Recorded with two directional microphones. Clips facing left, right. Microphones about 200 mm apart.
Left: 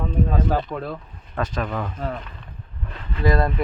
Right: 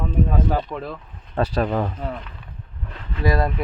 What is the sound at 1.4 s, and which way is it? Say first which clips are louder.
Speech: right 5 dB; 35° right (ahead or behind).